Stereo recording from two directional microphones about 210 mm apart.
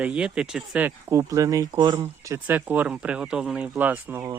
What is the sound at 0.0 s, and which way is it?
Speech, 5° right (ahead or behind).